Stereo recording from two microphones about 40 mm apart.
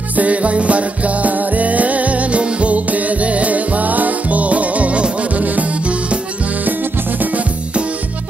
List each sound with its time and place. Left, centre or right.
0.1 s music: right
6.6 s music: right